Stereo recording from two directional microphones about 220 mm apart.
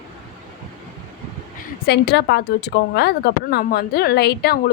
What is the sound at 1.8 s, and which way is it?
A woman's voice, 50° left (ahead or behind).